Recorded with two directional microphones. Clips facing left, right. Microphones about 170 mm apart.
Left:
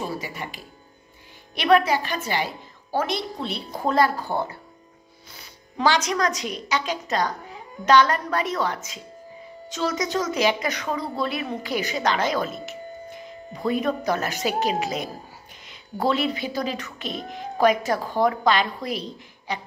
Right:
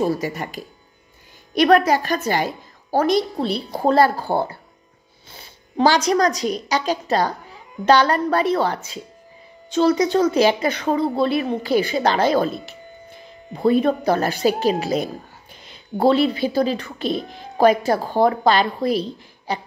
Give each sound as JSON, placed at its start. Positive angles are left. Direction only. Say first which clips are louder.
{"t": 0.0, "sound": "speech", "louder": "right 9 dB", "side_deg": -40}